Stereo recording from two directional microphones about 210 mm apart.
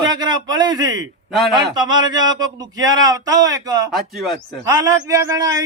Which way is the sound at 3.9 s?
Centre (ahead or behind).